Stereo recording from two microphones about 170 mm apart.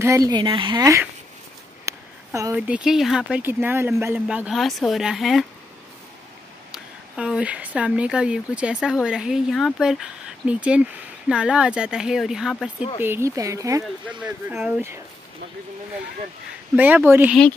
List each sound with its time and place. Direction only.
0.0 s speech: 20° right (ahead or behind)
1.9 s speech: 20° right (ahead or behind); by 5.4 s centre (ahead or behind)
6.7 s speech: 5° right (ahead or behind)
13.0 s speech: 15° right (ahead or behind)
14.2 s speech: 10° right (ahead or behind)
16.7 s speech: 10° right (ahead or behind)